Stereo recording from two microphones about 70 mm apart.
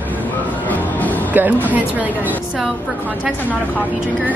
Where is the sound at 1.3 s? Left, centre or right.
Right.